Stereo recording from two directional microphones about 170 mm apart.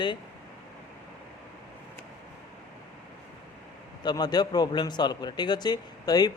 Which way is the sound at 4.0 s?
25° left (ahead or behind).